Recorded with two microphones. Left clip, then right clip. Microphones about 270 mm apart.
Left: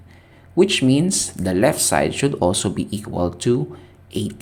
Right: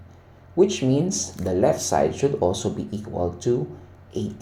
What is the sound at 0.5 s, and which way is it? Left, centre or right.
Speech, left.